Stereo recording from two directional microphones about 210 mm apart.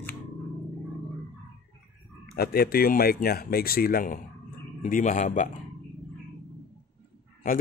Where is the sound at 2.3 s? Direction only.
45° left (ahead or behind).